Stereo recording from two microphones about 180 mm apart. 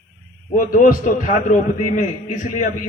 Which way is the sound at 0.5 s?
50° left (ahead or behind).